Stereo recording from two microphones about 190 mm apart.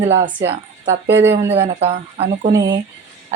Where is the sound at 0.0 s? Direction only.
30° right (ahead or behind).